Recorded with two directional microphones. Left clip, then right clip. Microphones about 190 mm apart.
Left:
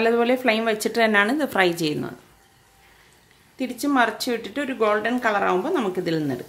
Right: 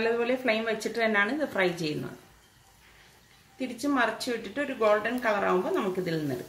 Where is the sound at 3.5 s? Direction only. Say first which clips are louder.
Left 7 dB; 55° left (ahead or behind).